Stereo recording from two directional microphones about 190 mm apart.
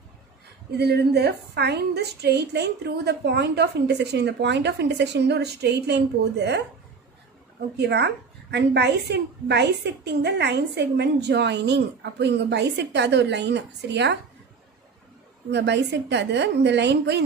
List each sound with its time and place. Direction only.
0.7 s a woman's voice: 60° right (ahead or behind)
7.7 s a woman's voice: 60° right (ahead or behind)
15.5 s a woman's voice: 65° right (ahead or behind)